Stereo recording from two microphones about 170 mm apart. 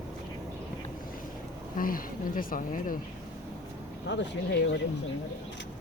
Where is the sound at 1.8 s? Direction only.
55° left (ahead or behind).